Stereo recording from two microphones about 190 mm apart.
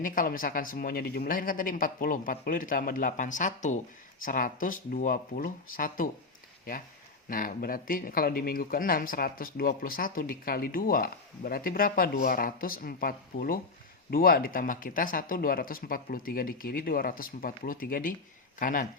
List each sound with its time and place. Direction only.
0.0 s speech: 45° left (ahead or behind)
7.3 s speech: 45° left (ahead or behind)